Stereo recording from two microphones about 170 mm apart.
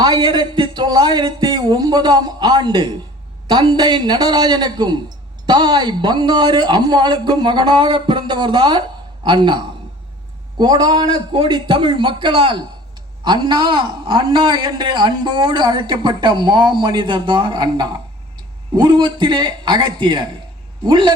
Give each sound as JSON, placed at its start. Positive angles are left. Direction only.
{"t": 0.0, "sound": "a man's voice", "side_deg": -25}